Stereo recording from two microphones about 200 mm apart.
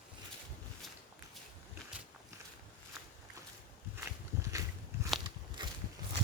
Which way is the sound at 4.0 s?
15° right (ahead or behind).